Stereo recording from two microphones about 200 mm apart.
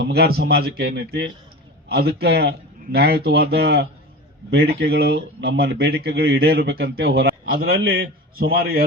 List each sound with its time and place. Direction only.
0.0 s speech: 55° right (ahead or behind)